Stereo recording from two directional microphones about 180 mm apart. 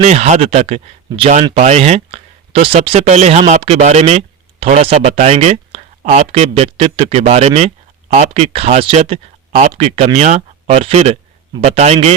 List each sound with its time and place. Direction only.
0.0 s speech: 40° right (ahead or behind)